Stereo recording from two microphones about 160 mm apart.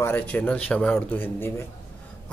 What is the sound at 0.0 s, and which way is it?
Speech, 10° left (ahead or behind).